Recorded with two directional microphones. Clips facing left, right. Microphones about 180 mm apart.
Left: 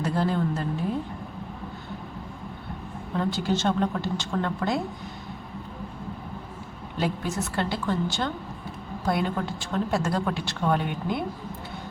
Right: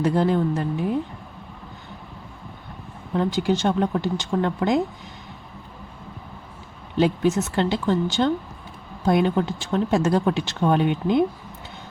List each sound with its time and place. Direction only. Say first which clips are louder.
0.0 s a woman's voice: right 5 dB; 20° right (ahead or behind)
3.2 s speech: right 4 dB; 15° right (ahead or behind)
7.0 s a woman's voice: right 8 dB; 20° right (ahead or behind)